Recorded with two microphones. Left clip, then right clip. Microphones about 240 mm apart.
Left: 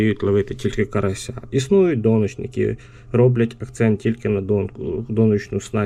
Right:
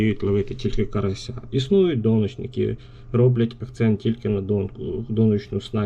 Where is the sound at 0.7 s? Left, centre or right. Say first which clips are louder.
Left 4 dB; centre.